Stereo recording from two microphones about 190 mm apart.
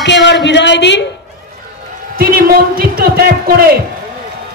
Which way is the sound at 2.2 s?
50° right (ahead or behind).